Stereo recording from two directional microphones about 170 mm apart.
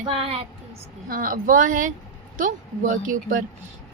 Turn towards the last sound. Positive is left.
turn(degrees=-50)  # may be behind; listen again after turning